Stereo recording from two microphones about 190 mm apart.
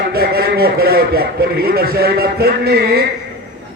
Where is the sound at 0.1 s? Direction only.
55° right (ahead or behind).